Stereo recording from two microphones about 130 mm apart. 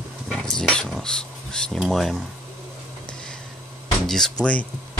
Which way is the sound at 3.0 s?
5° left (ahead or behind).